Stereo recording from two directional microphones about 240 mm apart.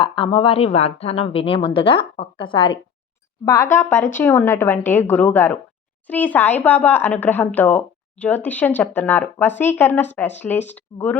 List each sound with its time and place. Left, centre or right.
0.0 s a woman's voice: left